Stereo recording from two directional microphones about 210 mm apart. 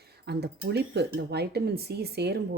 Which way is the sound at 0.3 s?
50° right (ahead or behind).